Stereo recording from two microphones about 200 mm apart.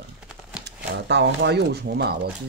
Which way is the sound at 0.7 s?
60° right (ahead or behind).